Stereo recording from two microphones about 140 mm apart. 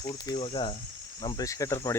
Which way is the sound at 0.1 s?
40° left (ahead or behind).